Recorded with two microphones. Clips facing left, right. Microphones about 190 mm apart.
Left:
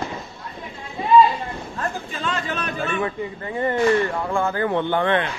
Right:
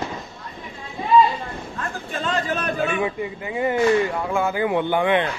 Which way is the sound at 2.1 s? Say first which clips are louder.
Right 3 dB; 45° right (ahead or behind).